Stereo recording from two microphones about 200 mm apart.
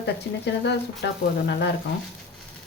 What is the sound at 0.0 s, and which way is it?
Speech, 60° left (ahead or behind).